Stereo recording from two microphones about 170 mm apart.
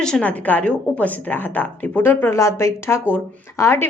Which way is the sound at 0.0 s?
5° left (ahead or behind).